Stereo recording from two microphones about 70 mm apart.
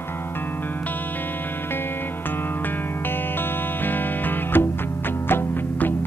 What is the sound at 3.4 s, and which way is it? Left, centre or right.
Music, left.